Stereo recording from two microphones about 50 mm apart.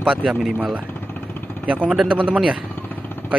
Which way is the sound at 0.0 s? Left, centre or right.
Right.